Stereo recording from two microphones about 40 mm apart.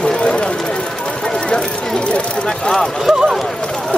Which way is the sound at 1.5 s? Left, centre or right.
Left.